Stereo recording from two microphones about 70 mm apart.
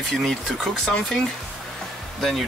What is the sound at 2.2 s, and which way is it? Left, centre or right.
Speech, centre.